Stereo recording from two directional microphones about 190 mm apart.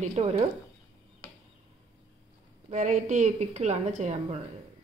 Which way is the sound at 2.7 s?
40° right (ahead or behind).